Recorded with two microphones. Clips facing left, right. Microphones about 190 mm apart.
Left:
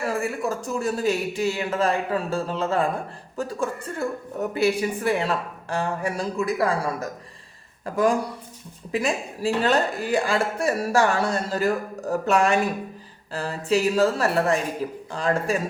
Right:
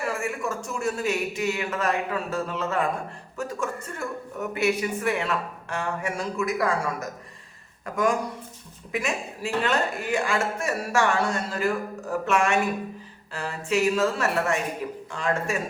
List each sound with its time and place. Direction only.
0.0 s speech: 35° left (ahead or behind)